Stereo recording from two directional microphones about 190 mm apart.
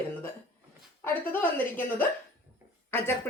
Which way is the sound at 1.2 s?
10° left (ahead or behind).